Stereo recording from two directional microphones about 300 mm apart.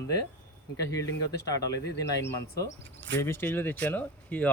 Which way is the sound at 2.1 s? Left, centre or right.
Left.